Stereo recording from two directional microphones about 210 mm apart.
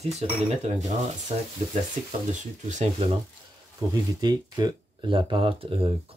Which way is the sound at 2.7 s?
30° right (ahead or behind).